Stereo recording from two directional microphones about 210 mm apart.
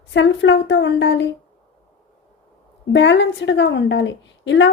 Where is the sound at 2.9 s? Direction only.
60° left (ahead or behind).